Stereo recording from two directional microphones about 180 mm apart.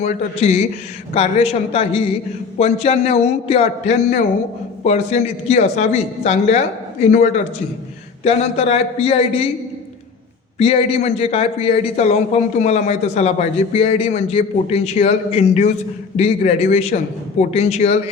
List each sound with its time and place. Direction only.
0.0 s speech: 40° left (ahead or behind)
10.6 s speech: 30° left (ahead or behind)